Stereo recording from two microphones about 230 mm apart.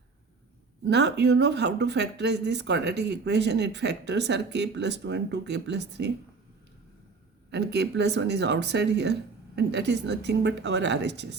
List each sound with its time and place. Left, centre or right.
0.9 s speech: right
7.5 s speech: right